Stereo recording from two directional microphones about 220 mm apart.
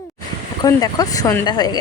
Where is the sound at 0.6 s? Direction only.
15° left (ahead or behind).